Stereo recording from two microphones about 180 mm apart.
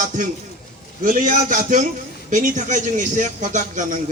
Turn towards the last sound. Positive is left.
turn(degrees=-45)  # may be behind; listen again after turning